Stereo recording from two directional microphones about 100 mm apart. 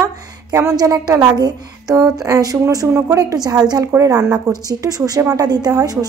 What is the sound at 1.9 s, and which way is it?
Speech, 30° right (ahead or behind).